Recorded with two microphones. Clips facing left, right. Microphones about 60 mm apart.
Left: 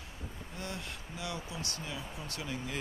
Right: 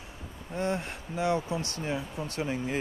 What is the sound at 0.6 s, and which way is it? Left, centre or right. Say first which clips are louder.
Speech: right 12 dB; right.